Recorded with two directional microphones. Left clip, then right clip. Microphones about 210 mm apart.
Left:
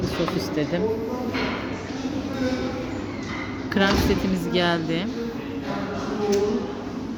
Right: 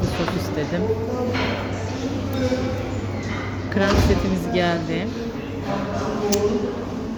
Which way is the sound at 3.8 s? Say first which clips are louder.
Right 1 dB; 25° left (ahead or behind).